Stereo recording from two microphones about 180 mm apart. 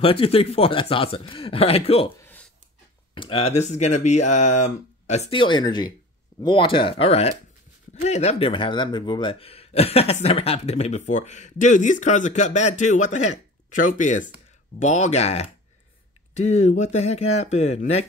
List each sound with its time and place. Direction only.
0.0 s speech: 30° left (ahead or behind)
3.2 s speech: 30° left (ahead or behind)